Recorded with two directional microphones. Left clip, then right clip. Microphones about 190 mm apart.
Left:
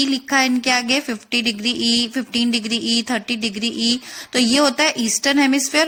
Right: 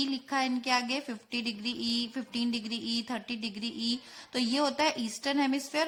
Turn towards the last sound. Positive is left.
turn(degrees=20)  # may be behind; listen again after turning